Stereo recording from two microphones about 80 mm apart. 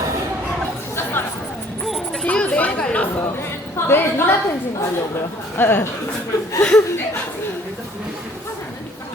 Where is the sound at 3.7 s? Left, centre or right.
Left.